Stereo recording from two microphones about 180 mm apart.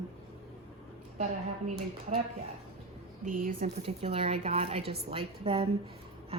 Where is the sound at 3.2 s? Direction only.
50° right (ahead or behind).